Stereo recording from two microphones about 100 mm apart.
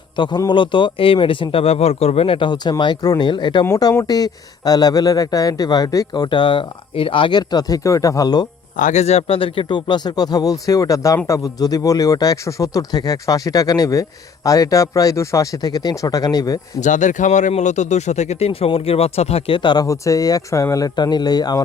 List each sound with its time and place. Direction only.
0.2 s speech: 45° left (ahead or behind)
1.6 s speech: 90° left; by 6.2 s 35° left (ahead or behind)
6.2 s speech: 55° left (ahead or behind)
9.0 s speech: 85° left; by 16.6 s 40° left (ahead or behind)
18.0 s speech: 90° left
19.5 s speech: 50° left (ahead or behind)
19.8 s speech: 35° left (ahead or behind)